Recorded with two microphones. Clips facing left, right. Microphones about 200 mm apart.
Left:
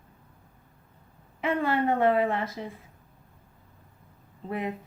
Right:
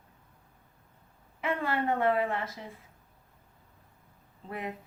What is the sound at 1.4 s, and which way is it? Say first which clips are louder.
A woman's voice: left 5 dB; 25° left (ahead or behind).